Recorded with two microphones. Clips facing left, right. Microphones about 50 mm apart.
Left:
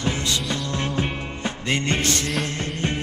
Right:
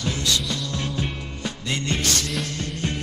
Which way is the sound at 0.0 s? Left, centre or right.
Left.